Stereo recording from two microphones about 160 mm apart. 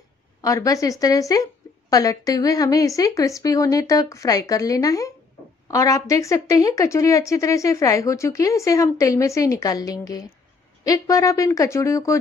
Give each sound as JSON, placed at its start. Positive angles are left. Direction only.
{"t": 0.4, "sound": "a woman's voice", "side_deg": 20}